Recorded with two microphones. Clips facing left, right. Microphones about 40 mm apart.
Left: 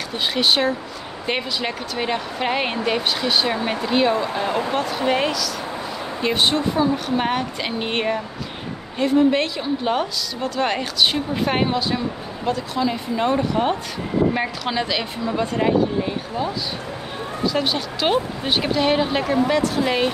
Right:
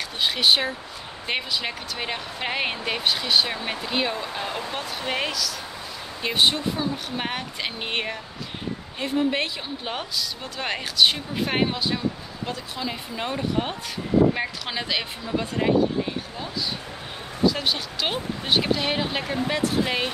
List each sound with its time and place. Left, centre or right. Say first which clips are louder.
0.2 s speech: left 2 dB; centre
4.3 s speech: left 7 dB; centre
4.7 s speech: left 7 dB; centre
9.0 s a woman's voice: left 7 dB; centre
17.5 s speech: left 2 dB; centre